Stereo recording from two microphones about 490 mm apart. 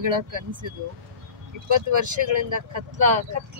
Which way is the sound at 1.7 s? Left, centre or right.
Right.